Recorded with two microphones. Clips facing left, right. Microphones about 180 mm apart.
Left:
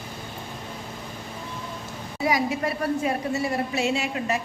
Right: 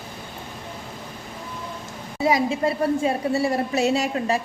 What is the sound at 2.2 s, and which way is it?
A woman's voice, 25° right (ahead or behind).